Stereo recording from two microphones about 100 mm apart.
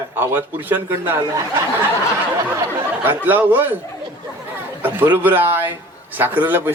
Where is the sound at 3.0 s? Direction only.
20° right (ahead or behind).